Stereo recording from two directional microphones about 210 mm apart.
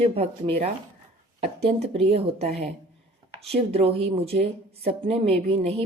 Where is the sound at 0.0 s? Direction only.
25° right (ahead or behind).